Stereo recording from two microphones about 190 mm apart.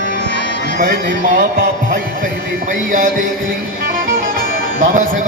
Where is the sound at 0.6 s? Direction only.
60° right (ahead or behind).